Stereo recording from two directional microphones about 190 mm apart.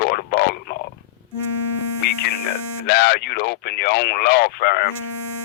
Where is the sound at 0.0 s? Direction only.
55° left (ahead or behind).